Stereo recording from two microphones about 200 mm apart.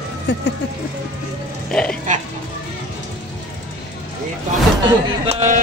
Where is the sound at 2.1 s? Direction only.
40° right (ahead or behind).